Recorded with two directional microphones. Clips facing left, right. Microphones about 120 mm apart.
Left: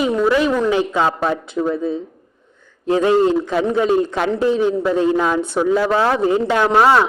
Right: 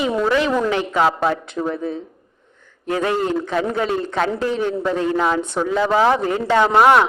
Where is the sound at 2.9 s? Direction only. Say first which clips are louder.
Left 6 dB; 25° left (ahead or behind).